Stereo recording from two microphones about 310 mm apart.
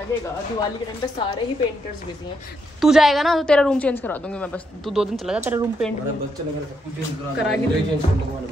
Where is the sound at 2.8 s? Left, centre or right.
Centre.